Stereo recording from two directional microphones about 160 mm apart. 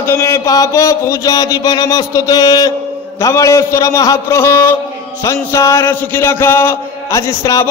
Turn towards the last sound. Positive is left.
turn(degrees=20)  # may be behind; listen again after turning